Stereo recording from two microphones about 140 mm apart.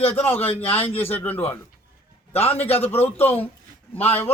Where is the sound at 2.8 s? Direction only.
15° left (ahead or behind).